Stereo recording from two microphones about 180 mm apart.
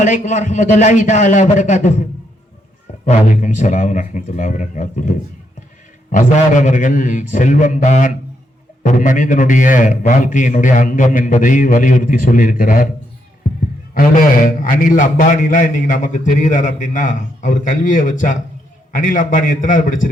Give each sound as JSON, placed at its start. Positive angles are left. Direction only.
{"t": 0.0, "sound": "a man's voice", "side_deg": 45}
{"t": 3.1, "sound": "a man's voice", "side_deg": 45}
{"t": 13.9, "sound": "a man's voice", "side_deg": 50}